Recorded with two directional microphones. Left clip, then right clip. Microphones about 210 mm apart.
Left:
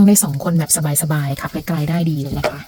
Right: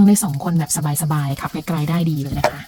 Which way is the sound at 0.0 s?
15° left (ahead or behind).